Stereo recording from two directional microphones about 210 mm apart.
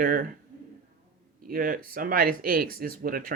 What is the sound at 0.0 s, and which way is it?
Speech, 40° right (ahead or behind).